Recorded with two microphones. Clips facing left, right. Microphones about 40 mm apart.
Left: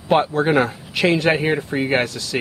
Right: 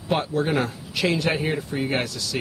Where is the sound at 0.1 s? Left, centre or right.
Left.